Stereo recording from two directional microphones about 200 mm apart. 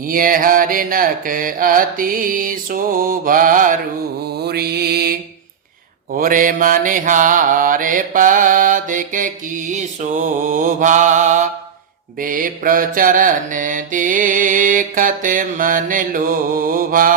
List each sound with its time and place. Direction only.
0.1 s mantra: 45° right (ahead or behind)
6.1 s mantra: 45° right (ahead or behind)